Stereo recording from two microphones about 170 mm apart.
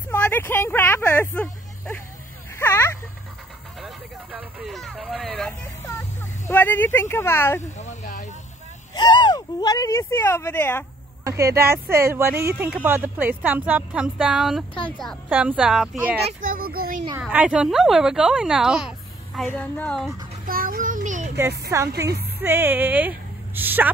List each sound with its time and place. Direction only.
0.1 s vehicle: 10° left (ahead or behind)
2.5 s a sound: 15° left (ahead or behind)
3.8 s vehicle: 10° right (ahead or behind)
5.9 s speech: 15° left (ahead or behind)
7.7 s a sound: 45° left (ahead or behind)
8.9 s speech: 25° left (ahead or behind); by 10.9 s 10° left (ahead or behind)
11.2 s speech: 15° right (ahead or behind)
16.3 s a child's voice: 55° right (ahead or behind)
17.2 s speech: 5° right (ahead or behind)
19.4 s speech: 10° left (ahead or behind)
20.4 s child singing: 60° right (ahead or behind)
21.4 s a woman's voice: 15° right (ahead or behind)